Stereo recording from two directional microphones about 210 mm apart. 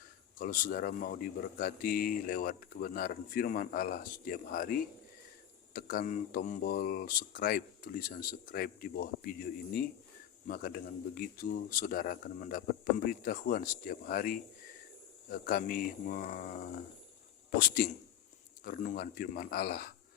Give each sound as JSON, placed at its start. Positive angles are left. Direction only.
{"t": 0.3, "sound": "speech", "side_deg": 40}